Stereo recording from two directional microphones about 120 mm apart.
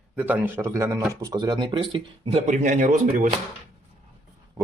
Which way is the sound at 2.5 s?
90° right.